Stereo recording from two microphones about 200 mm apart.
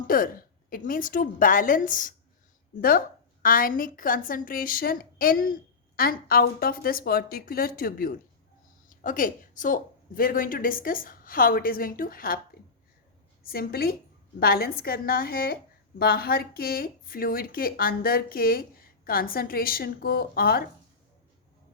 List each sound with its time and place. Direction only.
0.1 s speech: 45° left (ahead or behind)
3.4 s speech: 45° left (ahead or behind)
13.4 s speech: 50° left (ahead or behind)